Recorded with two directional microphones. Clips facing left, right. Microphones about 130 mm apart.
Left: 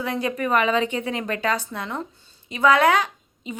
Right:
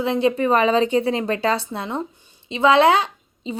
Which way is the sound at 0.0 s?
25° right (ahead or behind).